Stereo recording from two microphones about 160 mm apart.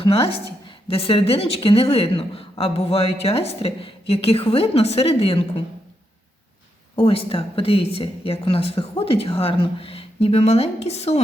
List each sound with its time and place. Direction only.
0.0 s speech: 35° left (ahead or behind)
6.9 s speech: 35° left (ahead or behind)